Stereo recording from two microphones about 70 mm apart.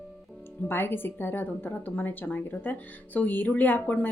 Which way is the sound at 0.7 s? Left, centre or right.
Left.